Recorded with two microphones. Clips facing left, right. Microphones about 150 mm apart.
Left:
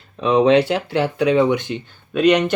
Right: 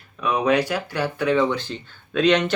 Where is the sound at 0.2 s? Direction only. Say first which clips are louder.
Left 6 dB; 25° left (ahead or behind).